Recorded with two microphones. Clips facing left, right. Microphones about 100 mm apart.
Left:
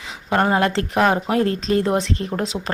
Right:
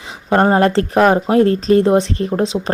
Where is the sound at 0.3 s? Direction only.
35° right (ahead or behind).